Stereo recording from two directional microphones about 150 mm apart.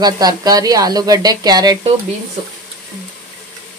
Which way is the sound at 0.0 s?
25° right (ahead or behind).